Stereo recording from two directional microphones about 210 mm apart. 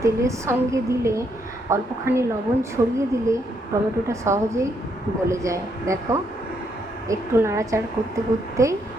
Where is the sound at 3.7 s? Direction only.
15° right (ahead or behind).